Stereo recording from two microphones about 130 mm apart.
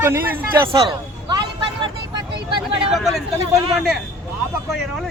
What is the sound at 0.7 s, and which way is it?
Speech, 45° right (ahead or behind).